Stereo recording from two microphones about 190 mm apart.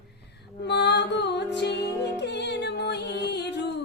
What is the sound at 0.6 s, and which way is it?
Music, 60° left (ahead or behind).